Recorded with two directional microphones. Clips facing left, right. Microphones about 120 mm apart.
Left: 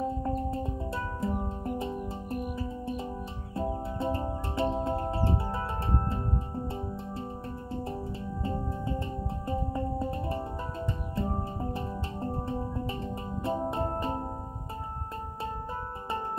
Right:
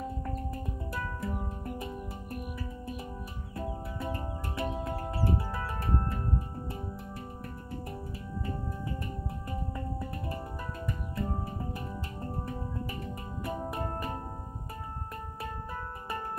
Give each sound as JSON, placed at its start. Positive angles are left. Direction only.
{"t": 0.0, "sound": "music", "side_deg": 30}